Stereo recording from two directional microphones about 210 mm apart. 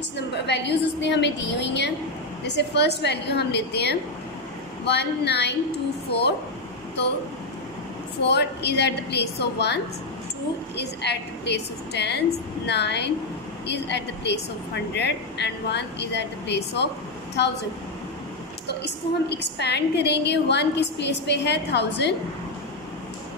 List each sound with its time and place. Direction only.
0.5 s a woman's voice: 55° left (ahead or behind)
8.2 s a woman's voice: 55° left (ahead or behind)
10.8 s a woman's voice: 55° left (ahead or behind)
18.7 s a woman's voice: 50° left (ahead or behind)